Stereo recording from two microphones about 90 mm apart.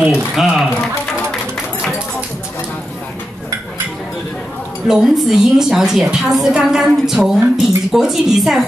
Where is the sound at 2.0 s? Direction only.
10° right (ahead or behind).